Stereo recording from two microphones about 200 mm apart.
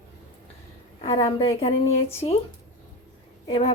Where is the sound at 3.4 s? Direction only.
30° left (ahead or behind).